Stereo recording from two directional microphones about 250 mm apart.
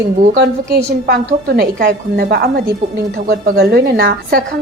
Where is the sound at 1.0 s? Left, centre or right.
Right.